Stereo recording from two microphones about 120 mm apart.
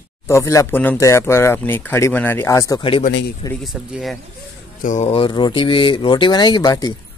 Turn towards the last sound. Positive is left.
turn(degrees=35)  # may be behind; listen again after turning